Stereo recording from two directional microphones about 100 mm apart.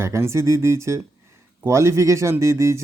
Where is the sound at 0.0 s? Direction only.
25° right (ahead or behind).